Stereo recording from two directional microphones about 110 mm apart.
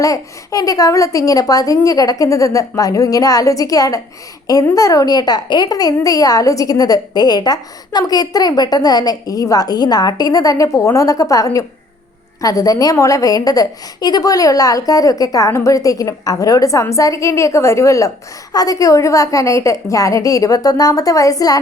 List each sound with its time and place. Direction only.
0.0 s a woman's voice: 30° left (ahead or behind)